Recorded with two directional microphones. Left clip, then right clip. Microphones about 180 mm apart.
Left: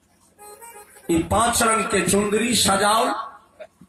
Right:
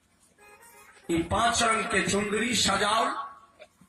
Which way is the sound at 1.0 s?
25° left (ahead or behind).